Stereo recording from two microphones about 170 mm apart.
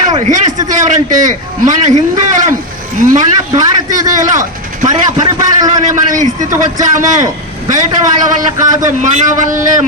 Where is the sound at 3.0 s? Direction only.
50° right (ahead or behind).